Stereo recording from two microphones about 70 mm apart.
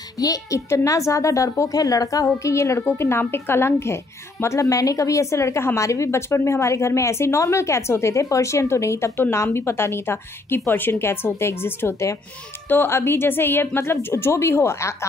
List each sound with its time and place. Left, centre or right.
0.2 s a woman's voice: left
0.7 s a woman's voice: left
4.6 s a woman's voice: left